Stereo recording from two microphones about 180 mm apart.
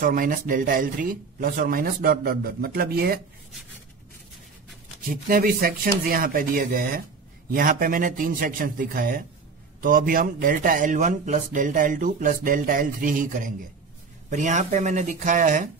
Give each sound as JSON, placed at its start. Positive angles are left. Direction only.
{"t": 0.0, "sound": "speech", "side_deg": -50}
{"t": 5.0, "sound": "speech", "side_deg": -50}